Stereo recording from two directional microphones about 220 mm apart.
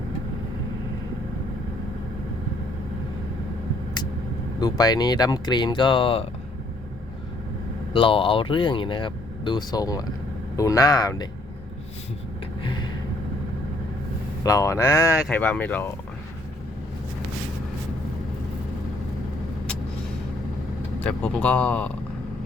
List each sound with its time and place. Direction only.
4.6 s speech: 20° left (ahead or behind)
7.9 s speech: 25° left (ahead or behind)
12.6 s a sound: 20° left (ahead or behind)
14.4 s speech: 15° left (ahead or behind)
21.0 s speech: 5° left (ahead or behind)